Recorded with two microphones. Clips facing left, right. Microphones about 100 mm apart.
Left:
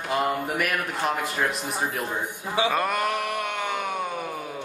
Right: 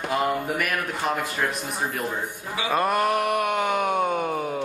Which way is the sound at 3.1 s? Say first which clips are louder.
Right 5 dB; 50° right (ahead or behind).